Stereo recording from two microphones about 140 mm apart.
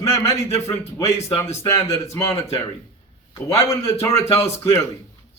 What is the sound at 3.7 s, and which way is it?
Speech, 20° left (ahead or behind).